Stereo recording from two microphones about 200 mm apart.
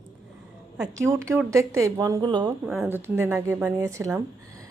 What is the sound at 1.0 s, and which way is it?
Speech, 10° right (ahead or behind).